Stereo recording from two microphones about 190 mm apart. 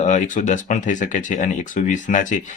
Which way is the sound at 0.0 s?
40° left (ahead or behind).